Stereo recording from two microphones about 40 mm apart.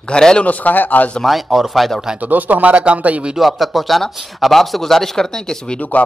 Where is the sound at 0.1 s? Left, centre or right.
Centre.